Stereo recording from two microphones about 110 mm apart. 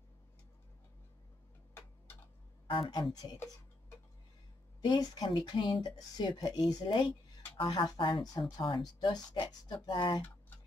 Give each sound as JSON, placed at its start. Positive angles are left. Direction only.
{"t": 2.9, "sound": "speech", "side_deg": 35}
{"t": 4.8, "sound": "speech", "side_deg": 40}